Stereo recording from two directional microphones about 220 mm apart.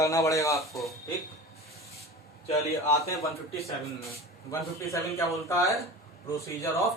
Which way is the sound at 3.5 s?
30° left (ahead or behind).